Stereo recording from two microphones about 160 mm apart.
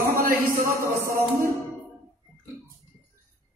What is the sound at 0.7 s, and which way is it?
Speech, 20° right (ahead or behind).